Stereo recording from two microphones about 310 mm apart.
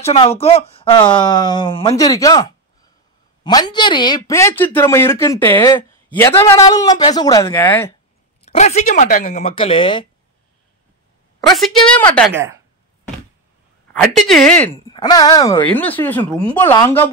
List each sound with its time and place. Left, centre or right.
0.0 s speech: centre
8.5 s speech: left
11.5 s a woman's voice: centre
14.0 s a woman's voice: centre
14.7 s speech: centre